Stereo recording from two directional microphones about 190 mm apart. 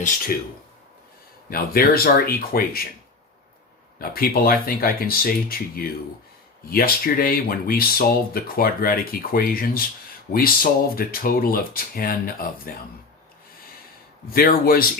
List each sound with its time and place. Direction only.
1.5 s speech: 50° left (ahead or behind)
3.9 s speech: 50° left (ahead or behind)
14.3 s speech: 50° left (ahead or behind)